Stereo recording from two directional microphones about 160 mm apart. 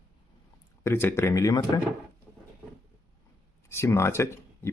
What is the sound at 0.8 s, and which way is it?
Speech, 15° left (ahead or behind).